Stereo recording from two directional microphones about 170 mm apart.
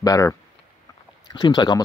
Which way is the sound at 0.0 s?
20° left (ahead or behind).